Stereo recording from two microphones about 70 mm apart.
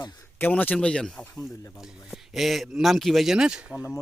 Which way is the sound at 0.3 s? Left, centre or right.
Left.